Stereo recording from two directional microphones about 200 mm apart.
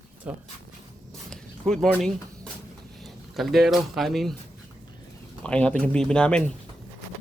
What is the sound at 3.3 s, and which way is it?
Speech, centre (ahead or behind).